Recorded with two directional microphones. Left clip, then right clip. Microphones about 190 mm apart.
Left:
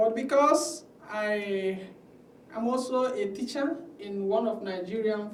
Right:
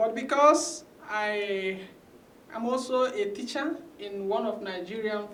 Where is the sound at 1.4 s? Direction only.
20° left (ahead or behind).